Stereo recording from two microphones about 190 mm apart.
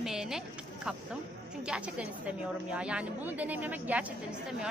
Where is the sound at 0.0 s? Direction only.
5° right (ahead or behind).